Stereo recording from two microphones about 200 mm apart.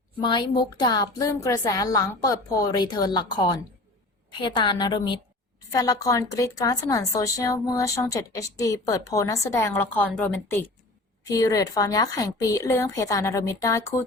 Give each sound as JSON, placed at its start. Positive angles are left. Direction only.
{"t": 0.2, "sound": "a woman's voice", "side_deg": 25}